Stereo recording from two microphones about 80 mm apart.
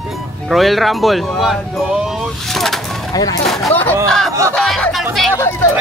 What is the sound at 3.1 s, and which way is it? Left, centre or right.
Speech, left.